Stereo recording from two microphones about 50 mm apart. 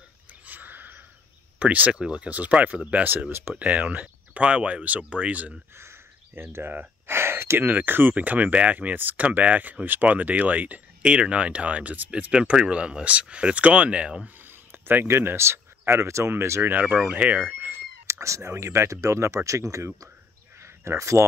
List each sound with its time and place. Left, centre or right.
0.5 s a sound: right
1.6 s speech: right
5.8 s a sound: right
7.6 s speech: right
14.2 s speech: right
17.1 s speech: right
17.5 s chicken: right
18.0 s speech: right
20.6 s speech: right